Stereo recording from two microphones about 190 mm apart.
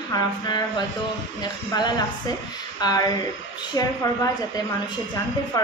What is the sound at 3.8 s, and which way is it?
Speech, 20° left (ahead or behind).